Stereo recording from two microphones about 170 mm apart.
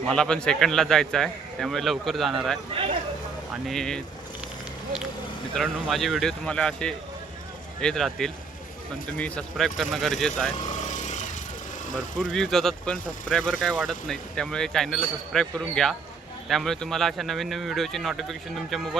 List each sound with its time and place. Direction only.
0.1 s speech: 5° left (ahead or behind)
5.5 s speech: centre (ahead or behind)
10.6 s vehicle: 45° left (ahead or behind)
12.1 s speech: centre (ahead or behind)